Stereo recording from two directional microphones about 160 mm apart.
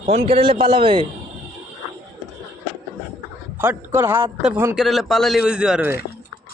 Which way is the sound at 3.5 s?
10° right (ahead or behind).